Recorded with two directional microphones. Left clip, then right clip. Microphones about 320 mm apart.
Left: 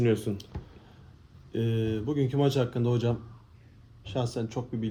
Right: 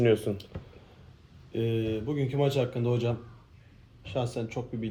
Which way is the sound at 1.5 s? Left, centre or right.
Centre.